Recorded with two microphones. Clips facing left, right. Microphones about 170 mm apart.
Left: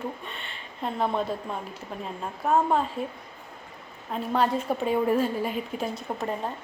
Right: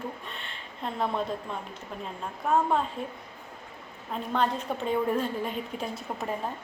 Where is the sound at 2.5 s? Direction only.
5° left (ahead or behind).